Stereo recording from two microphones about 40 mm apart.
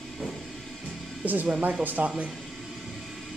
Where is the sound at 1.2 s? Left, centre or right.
Right.